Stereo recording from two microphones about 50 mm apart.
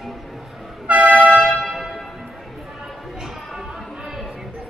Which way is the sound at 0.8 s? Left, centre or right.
Right.